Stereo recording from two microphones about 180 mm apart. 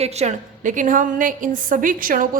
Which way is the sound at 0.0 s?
35° right (ahead or behind).